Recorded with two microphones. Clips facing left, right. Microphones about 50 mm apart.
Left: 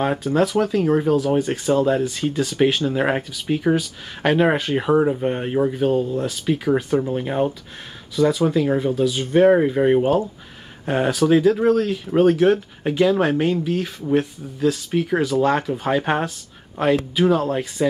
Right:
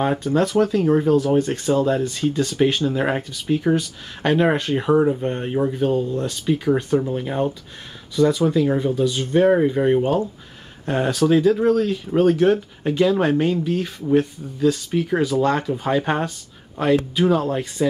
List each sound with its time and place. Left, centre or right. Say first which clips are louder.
0.0 s speech: even; centre